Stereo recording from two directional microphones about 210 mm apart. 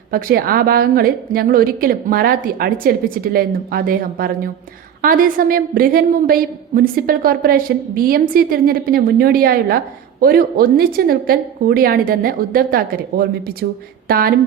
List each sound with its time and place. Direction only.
0.1 s a woman's voice: 45° right (ahead or behind)